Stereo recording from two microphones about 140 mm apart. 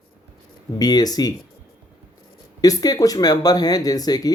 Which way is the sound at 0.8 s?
30° left (ahead or behind).